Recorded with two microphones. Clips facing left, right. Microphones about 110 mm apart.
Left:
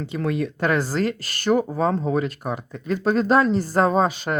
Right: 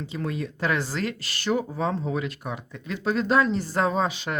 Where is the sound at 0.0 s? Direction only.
65° left (ahead or behind).